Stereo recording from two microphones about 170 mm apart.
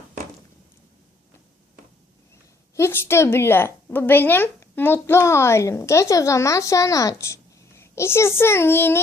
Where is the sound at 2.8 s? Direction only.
15° left (ahead or behind).